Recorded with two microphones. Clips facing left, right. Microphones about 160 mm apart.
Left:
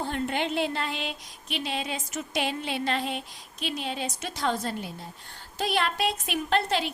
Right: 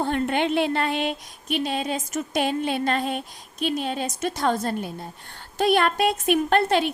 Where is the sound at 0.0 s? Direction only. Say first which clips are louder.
Right 6 dB; 60° right (ahead or behind).